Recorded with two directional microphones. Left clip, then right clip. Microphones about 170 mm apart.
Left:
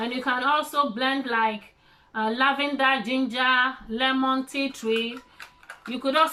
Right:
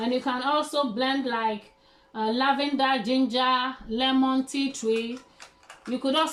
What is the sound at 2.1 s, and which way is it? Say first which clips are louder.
Speech: left 1 dB; 25° right (ahead or behind).